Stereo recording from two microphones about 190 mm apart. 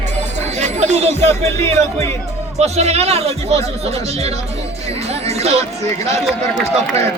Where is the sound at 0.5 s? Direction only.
35° right (ahead or behind).